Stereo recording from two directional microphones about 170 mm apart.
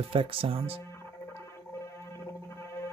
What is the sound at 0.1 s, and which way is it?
Speech, 30° right (ahead or behind).